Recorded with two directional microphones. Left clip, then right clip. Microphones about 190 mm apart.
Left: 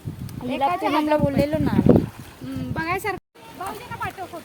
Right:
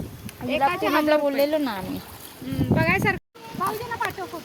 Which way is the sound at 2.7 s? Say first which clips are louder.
Right 4 dB; 65° left (ahead or behind).